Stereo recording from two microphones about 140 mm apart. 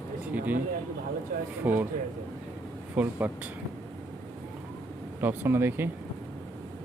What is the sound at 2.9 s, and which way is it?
Speech, 10° right (ahead or behind).